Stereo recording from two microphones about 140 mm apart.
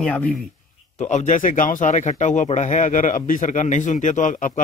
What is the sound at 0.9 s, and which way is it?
Speech, 60° left (ahead or behind).